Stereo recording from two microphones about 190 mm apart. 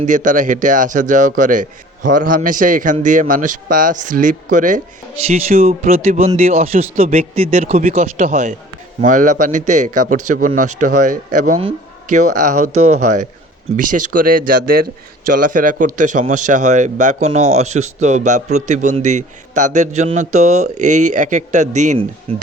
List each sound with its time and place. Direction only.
0.0 s a man's voice: 45° right (ahead or behind)